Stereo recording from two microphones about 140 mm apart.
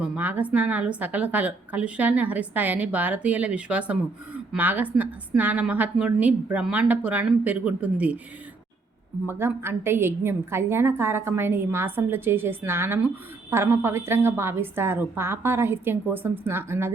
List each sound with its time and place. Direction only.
0.0 s a woman's voice: 10° right (ahead or behind)
9.2 s a woman's voice: 15° right (ahead or behind)